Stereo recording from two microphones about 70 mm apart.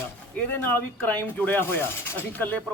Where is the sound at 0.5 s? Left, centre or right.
Left.